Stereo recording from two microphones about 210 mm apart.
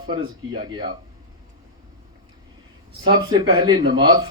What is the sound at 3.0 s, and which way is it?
Speech, 20° right (ahead or behind).